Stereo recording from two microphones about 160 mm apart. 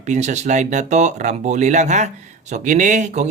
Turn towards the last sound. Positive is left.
turn(degrees=-50)  # may be behind; listen again after turning